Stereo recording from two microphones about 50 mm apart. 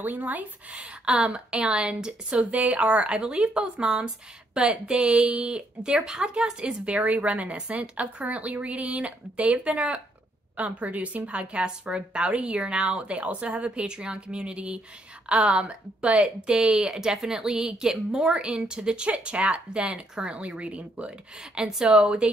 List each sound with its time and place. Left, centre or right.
0.0 s a woman's voice: right
21.5 s speech: centre